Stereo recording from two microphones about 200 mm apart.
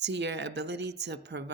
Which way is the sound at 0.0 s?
60° right (ahead or behind).